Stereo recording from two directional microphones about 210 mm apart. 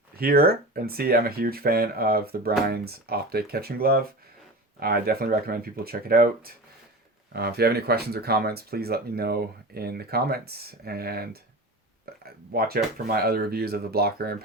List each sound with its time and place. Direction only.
0.2 s speech: 45° right (ahead or behind)